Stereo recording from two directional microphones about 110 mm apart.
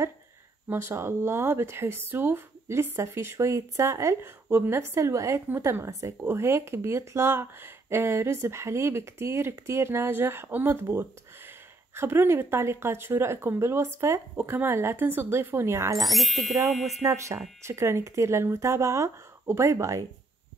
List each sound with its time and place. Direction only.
0.7 s speech: 20° right (ahead or behind)
16.0 s speech: centre (ahead or behind)
17.0 s speech: 30° right (ahead or behind)